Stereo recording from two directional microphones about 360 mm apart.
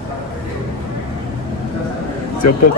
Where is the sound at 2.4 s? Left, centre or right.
Left.